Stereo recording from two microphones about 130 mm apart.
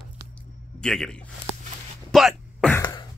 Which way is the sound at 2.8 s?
30° left (ahead or behind).